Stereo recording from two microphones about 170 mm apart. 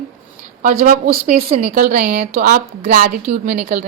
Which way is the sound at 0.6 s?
50° right (ahead or behind).